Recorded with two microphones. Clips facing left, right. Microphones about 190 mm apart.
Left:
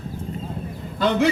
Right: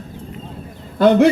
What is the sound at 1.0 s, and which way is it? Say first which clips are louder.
Speech: right 8 dB; 55° right (ahead or behind).